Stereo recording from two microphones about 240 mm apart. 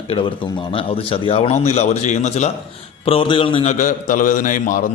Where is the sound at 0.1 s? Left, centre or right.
Left.